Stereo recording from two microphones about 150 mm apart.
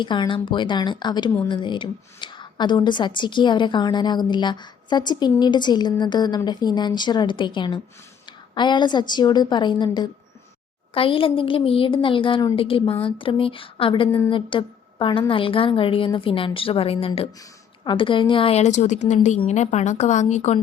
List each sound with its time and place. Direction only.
0.0 s a woman's voice: 30° left (ahead or behind); by 20.6 s 50° left (ahead or behind)